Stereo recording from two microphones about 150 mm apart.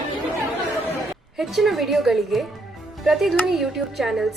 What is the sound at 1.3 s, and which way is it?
A woman's voice, centre (ahead or behind).